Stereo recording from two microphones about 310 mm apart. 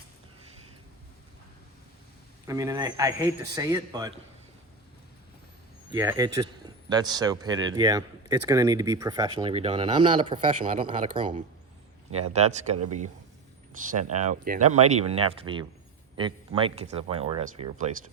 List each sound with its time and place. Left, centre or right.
2.5 s a man's voice: centre
5.9 s a man's voice: centre
13.8 s a man's voice: right